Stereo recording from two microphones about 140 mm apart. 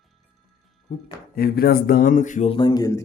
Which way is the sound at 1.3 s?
90° left.